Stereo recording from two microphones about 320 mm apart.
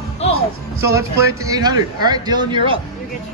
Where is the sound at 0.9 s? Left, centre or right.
Centre.